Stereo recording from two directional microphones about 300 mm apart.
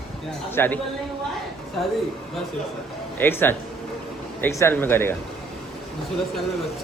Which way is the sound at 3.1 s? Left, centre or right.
Centre.